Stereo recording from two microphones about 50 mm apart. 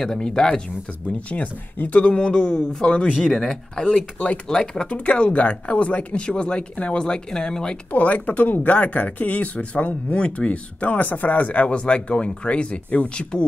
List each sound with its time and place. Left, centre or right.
0.0 s speech: centre
1.3 s speech: left
7.9 s speech: left